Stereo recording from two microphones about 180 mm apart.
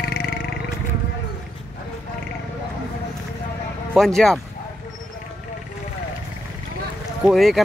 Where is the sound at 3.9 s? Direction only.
Centre (ahead or behind).